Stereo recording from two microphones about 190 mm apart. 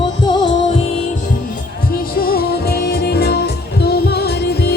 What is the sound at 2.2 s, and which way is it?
Music, 50° left (ahead or behind).